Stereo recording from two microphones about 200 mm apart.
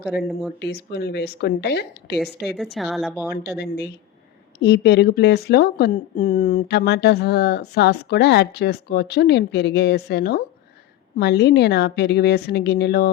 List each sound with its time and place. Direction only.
0.6 s speech: 55° left (ahead or behind)
2.1 s speech: centre (ahead or behind)
3.4 s speech: 55° left (ahead or behind)